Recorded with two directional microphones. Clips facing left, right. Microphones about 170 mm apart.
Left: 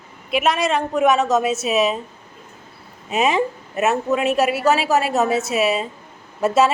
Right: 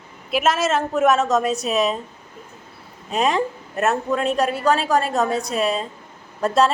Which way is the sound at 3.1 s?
5° left (ahead or behind).